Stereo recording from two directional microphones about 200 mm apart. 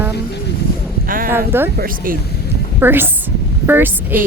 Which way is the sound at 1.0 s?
45° right (ahead or behind).